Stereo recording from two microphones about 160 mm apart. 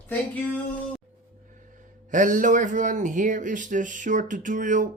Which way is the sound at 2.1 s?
55° right (ahead or behind).